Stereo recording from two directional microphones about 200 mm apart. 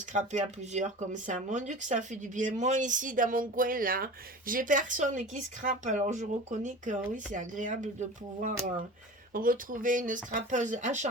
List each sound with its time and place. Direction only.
0.1 s speech: 35° right (ahead or behind)